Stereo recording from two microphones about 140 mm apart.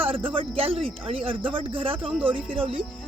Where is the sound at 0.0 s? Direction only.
40° right (ahead or behind).